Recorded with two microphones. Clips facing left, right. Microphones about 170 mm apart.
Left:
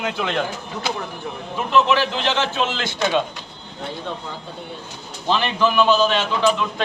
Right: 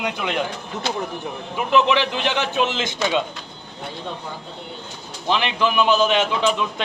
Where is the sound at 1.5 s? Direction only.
15° right (ahead or behind).